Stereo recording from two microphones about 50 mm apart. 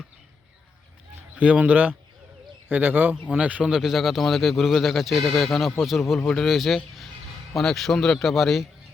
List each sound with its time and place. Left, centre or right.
1.4 s speech: right
3.3 s a man's voice: right
3.7 s a man's voice: centre